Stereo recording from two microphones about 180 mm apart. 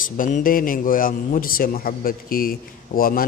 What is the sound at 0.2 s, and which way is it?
A man's voice, 50° left (ahead or behind).